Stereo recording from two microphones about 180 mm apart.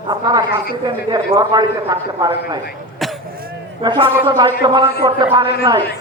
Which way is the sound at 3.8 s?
25° right (ahead or behind).